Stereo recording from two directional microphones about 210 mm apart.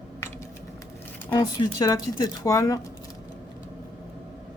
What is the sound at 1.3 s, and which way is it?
Speech, 20° left (ahead or behind).